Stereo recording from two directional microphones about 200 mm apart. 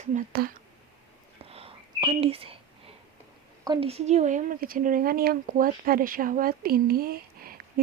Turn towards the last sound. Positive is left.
turn(degrees=-50)  # may be behind; listen again after turning